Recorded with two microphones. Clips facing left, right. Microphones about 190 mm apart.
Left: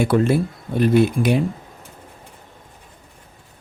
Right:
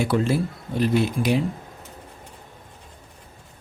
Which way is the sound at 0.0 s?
55° left (ahead or behind).